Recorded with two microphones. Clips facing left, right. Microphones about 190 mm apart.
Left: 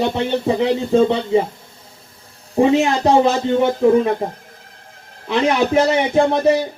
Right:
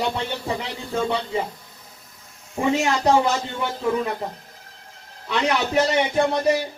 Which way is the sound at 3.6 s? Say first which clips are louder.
Left 9 dB; 45° left (ahead or behind).